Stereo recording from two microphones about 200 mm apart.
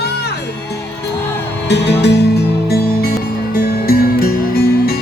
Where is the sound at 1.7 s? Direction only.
60° left (ahead or behind).